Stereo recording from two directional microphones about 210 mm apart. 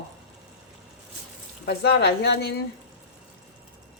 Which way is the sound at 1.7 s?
50° left (ahead or behind).